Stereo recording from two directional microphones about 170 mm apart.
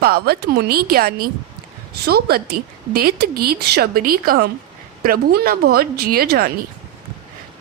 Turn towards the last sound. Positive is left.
turn(degrees=-65)  # may be behind; listen again after turning